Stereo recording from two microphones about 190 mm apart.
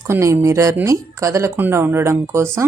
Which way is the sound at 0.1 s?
15° right (ahead or behind).